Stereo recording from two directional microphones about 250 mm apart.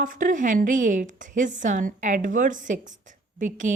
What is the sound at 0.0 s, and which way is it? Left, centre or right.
A woman's voice, right.